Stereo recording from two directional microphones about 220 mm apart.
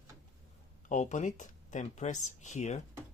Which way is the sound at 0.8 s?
35° left (ahead or behind).